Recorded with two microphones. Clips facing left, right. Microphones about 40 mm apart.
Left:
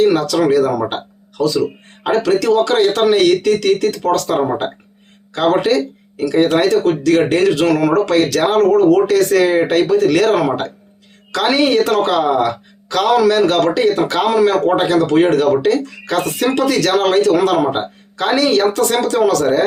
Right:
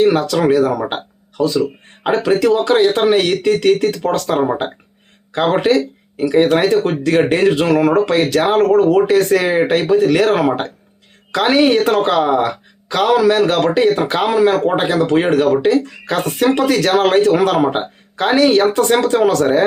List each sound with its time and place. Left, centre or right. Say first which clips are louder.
0.4 s a woman's voice: right 1 dB; right
4.4 s speech: even; centre
5.3 s a woman's voice: even; right
9.3 s a woman's voice: left 1 dB; centre; by 19.6 s right